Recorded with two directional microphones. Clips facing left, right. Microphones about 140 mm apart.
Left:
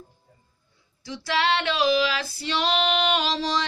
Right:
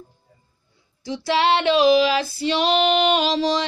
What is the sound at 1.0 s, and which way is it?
Female singing, 25° right (ahead or behind).